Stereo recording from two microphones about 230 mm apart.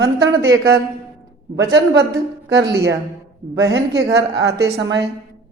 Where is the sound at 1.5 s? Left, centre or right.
Right.